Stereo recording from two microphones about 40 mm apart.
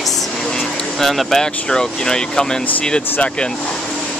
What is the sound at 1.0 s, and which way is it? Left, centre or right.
Speech, centre.